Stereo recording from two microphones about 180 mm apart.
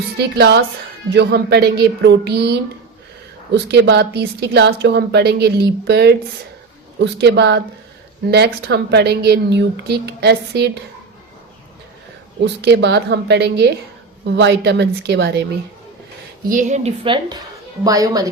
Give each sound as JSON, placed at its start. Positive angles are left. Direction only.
{"t": 0.2, "sound": "a woman's voice", "side_deg": -65}
{"t": 8.6, "sound": "a woman's voice", "side_deg": -65}
{"t": 12.6, "sound": "a woman's voice", "side_deg": -70}
{"t": 16.5, "sound": "a woman's voice", "side_deg": -45}